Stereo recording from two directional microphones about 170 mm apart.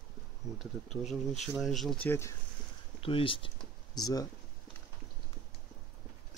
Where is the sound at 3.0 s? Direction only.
30° left (ahead or behind).